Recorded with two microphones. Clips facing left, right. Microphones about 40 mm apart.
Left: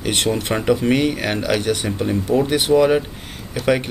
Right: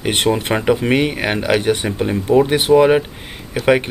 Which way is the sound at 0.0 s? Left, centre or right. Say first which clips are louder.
Right 3 dB; right.